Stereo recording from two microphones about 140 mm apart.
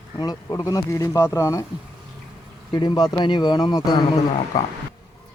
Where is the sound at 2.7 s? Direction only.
30° left (ahead or behind).